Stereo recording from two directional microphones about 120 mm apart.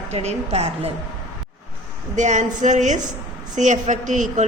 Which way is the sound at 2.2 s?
90° right.